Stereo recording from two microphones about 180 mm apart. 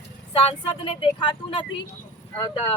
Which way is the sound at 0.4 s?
30° left (ahead or behind).